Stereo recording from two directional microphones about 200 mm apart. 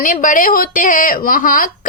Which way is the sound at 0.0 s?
40° left (ahead or behind).